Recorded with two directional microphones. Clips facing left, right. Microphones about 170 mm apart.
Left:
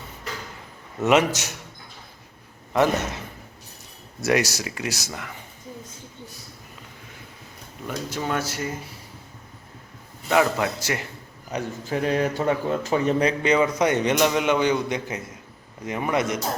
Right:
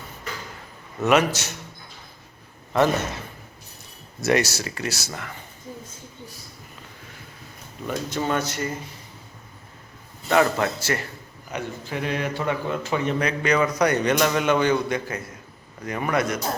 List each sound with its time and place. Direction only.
1.0 s a man's voice: 20° left (ahead or behind)
2.7 s speech: 10° left (ahead or behind)
4.2 s speech: 10° left (ahead or behind)
7.9 s speech: 5° left (ahead or behind)
10.2 s speech: 10° left (ahead or behind)
11.5 s a man's voice: 35° left (ahead or behind); by 16.4 s 20° left (ahead or behind)